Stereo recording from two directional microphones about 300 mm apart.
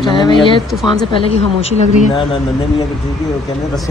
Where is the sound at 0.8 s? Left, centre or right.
Centre.